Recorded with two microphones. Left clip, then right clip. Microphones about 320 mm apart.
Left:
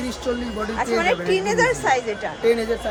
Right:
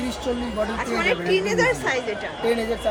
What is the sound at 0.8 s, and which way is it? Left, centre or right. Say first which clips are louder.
Speech: left 5 dB; left.